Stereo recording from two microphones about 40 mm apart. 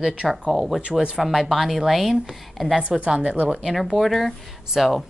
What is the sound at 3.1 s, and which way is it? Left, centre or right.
Speech, right.